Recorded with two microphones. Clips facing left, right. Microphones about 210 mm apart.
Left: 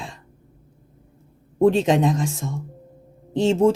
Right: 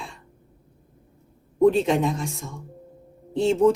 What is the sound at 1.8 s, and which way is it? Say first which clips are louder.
Speech: left 3 dB; 90° left.